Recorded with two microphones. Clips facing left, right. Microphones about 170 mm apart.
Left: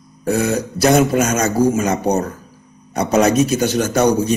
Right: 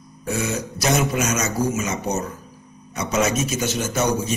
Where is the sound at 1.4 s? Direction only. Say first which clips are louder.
Left 7 dB; 30° left (ahead or behind).